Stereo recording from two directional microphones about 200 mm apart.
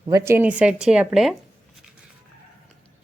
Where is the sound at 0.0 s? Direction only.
15° right (ahead or behind).